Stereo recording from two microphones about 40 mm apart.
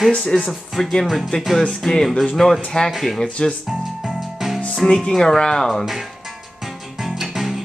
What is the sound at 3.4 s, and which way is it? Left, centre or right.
Speech, left.